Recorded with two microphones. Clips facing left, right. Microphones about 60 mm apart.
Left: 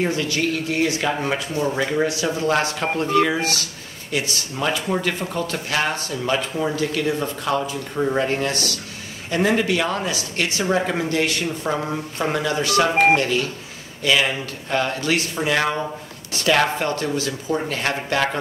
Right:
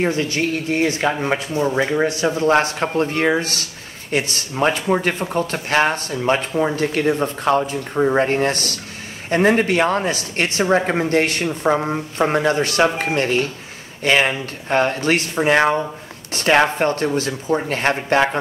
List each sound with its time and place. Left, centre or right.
0.0 s speech: right
2.0 s speech: right
7.9 s speech: right
12.9 s speech: left
13.2 s speech: right